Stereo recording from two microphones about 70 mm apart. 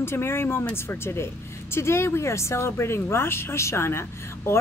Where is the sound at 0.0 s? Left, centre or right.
Left.